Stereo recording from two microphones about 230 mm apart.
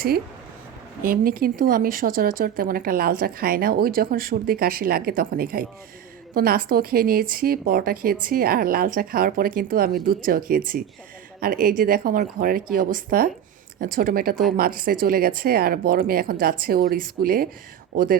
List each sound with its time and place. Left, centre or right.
1.0 s speech: right